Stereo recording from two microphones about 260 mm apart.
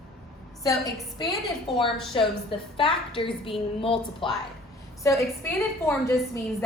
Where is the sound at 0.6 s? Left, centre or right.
Centre.